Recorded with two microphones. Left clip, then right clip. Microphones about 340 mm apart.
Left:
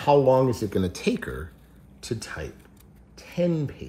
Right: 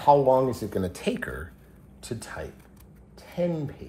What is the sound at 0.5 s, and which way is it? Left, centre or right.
Speech, centre.